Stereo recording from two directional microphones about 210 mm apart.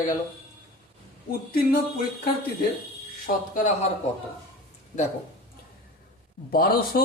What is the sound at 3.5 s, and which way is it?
Speech, 35° left (ahead or behind).